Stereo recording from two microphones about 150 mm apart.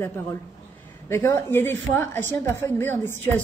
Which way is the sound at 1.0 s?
20° left (ahead or behind).